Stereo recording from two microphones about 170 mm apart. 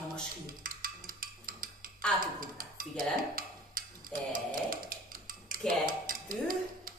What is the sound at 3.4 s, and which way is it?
Tick-tock, 55° right (ahead or behind).